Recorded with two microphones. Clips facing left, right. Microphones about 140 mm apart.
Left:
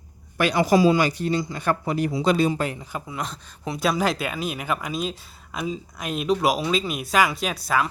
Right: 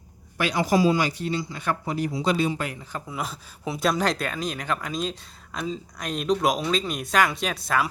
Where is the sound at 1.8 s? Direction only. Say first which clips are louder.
Left 2 dB; 65° left (ahead or behind).